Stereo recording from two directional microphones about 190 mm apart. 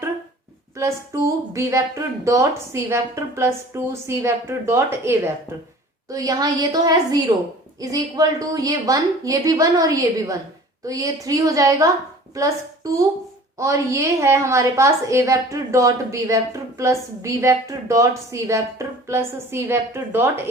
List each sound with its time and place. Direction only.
0.8 s a woman's voice: 15° right (ahead or behind)